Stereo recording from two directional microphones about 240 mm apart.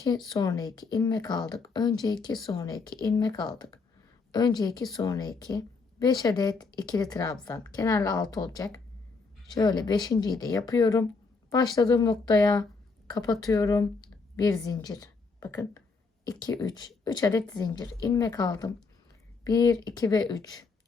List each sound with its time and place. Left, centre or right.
0.3 s a woman's voice: centre